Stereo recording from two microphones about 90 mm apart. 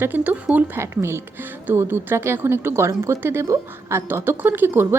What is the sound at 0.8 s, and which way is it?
A woman's voice, 30° right (ahead or behind).